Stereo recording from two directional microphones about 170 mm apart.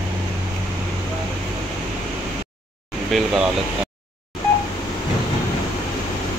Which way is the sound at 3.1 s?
Centre (ahead or behind).